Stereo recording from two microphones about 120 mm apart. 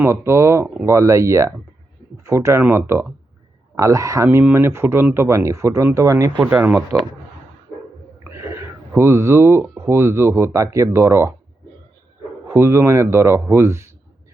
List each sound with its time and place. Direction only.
0.0 s speech: 20° right (ahead or behind)
6.4 s speech: 15° right (ahead or behind)
8.2 s a sound: 20° right (ahead or behind)
9.0 s speech: 25° right (ahead or behind)
12.5 s speech: 20° right (ahead or behind)